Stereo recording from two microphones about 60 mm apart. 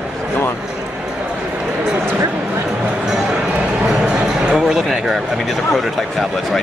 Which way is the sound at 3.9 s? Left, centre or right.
Centre.